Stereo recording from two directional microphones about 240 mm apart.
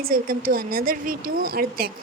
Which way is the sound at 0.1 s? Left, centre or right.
Right.